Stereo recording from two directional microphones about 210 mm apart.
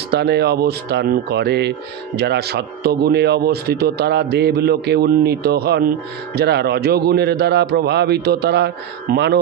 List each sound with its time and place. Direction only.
0.1 s speech: 50° right (ahead or behind)